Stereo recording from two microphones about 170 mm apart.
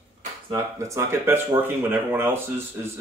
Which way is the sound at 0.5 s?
20° right (ahead or behind).